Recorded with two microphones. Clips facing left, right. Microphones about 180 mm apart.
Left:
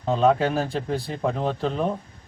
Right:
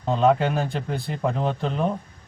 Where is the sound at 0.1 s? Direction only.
Centre (ahead or behind).